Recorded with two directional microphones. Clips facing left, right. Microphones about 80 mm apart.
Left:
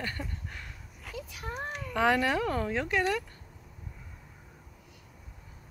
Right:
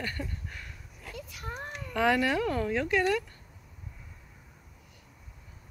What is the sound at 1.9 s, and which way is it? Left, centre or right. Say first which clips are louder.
Speech: even; left.